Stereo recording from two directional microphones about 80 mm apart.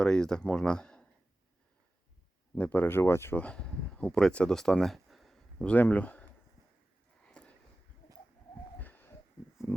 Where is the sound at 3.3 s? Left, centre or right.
Centre.